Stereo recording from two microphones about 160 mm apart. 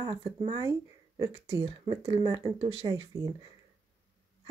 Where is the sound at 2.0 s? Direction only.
35° right (ahead or behind).